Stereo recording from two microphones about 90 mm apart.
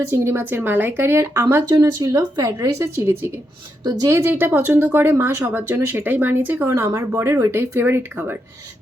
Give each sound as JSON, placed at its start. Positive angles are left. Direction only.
{"t": 0.1, "sound": "speech", "side_deg": -25}
{"t": 1.7, "sound": "speech", "side_deg": -40}